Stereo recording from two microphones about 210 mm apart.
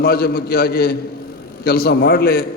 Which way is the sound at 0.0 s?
45° left (ahead or behind).